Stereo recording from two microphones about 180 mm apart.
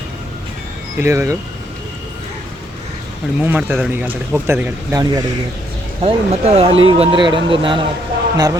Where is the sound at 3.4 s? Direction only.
10° right (ahead or behind).